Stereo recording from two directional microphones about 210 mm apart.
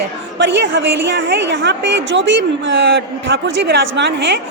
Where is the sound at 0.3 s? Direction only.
60° right (ahead or behind).